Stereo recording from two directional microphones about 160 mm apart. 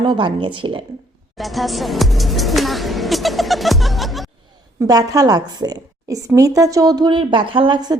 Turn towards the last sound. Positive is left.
turn(degrees=-25)  # may be behind; listen again after turning